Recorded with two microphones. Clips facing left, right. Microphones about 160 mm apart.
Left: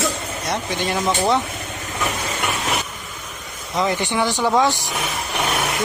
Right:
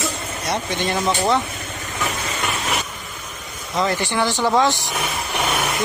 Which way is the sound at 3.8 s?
15° left (ahead or behind).